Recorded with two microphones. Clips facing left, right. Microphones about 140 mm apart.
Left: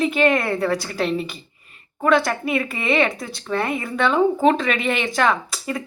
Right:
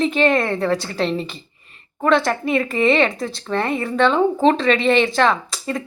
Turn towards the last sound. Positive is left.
turn(degrees=5)  # may be behind; listen again after turning